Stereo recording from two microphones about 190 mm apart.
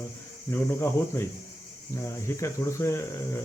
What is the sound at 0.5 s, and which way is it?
Speech, 15° left (ahead or behind).